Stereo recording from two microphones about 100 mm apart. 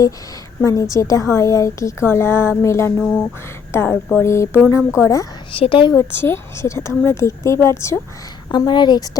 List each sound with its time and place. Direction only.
0.6 s a woman's voice: 35° left (ahead or behind)
3.0 s speech: 5° left (ahead or behind)
3.7 s a woman's voice: 25° left (ahead or behind)
5.5 s a woman's voice: 60° left (ahead or behind)
6.1 s a woman's voice: 25° left (ahead or behind)
8.4 s a woman's voice: 50° left (ahead or behind)